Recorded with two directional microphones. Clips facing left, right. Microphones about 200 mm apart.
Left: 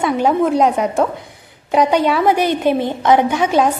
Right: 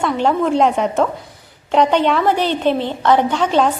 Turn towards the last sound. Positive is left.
turn(degrees=10)  # may be behind; listen again after turning